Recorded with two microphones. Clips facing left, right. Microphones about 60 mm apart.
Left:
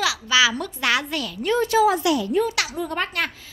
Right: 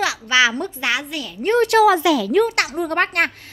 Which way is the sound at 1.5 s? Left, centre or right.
Right.